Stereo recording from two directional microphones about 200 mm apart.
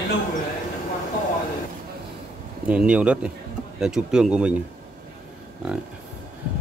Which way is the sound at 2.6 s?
5° right (ahead or behind).